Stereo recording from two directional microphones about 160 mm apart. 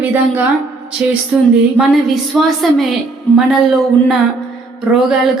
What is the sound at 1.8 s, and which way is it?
A woman's voice, centre (ahead or behind).